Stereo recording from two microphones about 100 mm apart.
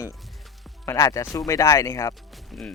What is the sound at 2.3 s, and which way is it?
Music, centre (ahead or behind).